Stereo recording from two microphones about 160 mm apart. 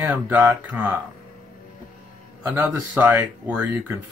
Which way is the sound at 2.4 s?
10° right (ahead or behind).